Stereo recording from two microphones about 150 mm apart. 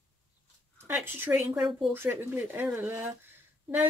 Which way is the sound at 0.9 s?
15° right (ahead or behind).